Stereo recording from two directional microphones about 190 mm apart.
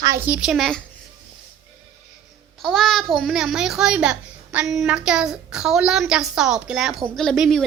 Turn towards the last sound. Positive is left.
turn(degrees=0)  # may be behind; listen again after turning